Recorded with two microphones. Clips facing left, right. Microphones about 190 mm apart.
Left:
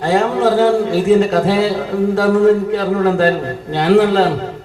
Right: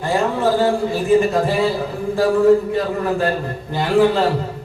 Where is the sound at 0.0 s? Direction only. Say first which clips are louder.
Left 4 dB; 85° left.